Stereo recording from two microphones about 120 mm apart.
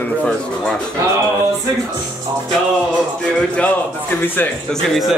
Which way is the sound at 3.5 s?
15° left (ahead or behind).